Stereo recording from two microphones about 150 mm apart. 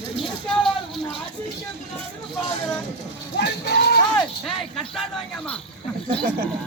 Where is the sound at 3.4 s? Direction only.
90° left.